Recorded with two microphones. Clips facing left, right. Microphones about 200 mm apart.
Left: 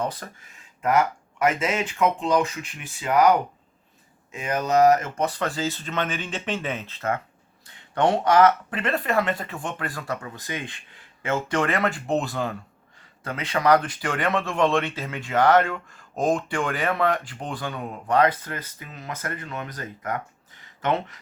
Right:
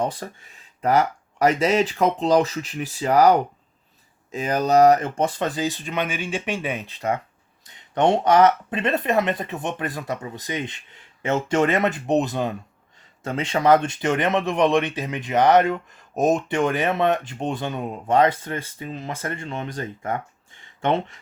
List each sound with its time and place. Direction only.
0.0 s speech: 30° right (ahead or behind)